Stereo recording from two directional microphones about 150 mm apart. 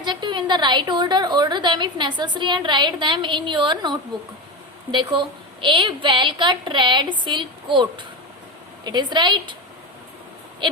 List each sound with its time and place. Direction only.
0.0 s a woman's voice: 30° right (ahead or behind)